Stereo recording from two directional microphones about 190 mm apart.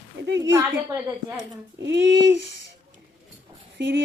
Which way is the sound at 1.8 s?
65° right (ahead or behind).